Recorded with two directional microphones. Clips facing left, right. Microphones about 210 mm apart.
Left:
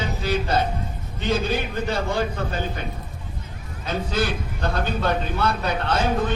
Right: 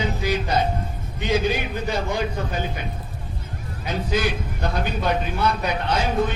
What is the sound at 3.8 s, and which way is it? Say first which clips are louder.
A man's voice: right 1 dB; 15° right (ahead or behind).